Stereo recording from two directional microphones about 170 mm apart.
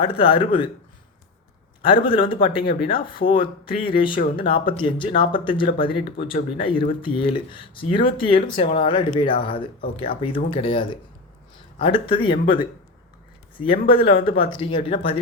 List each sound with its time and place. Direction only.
0.2 s speech: 30° left (ahead or behind)
1.8 s speech: 30° left (ahead or behind)